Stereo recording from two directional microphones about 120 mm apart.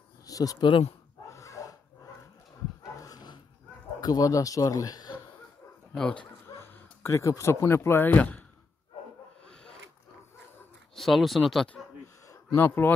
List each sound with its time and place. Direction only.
0.3 s speech: 30° left (ahead or behind)
1.3 s a sound: 25° left (ahead or behind)
3.0 s dog: 30° left (ahead or behind)
4.0 s speech: 30° left (ahead or behind)
5.9 s speech: 5° left (ahead or behind)
6.4 s speech: 20° left (ahead or behind)
9.5 s a sound: 5° left (ahead or behind)
11.0 s speech: centre (ahead or behind)
12.5 s speech: 20° left (ahead or behind)